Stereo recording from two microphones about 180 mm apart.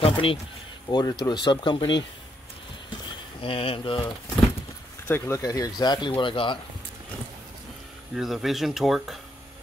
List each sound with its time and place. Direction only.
0.0 s speech: 30° left (ahead or behind)
3.1 s speech: 30° left (ahead or behind)
5.0 s speech: 15° left (ahead or behind)
8.2 s speech: centre (ahead or behind)